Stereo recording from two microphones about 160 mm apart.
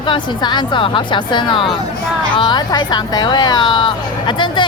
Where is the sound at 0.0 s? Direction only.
30° left (ahead or behind).